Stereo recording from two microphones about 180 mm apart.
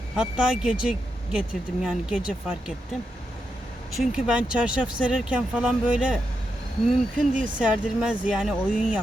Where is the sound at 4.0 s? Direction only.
5° right (ahead or behind).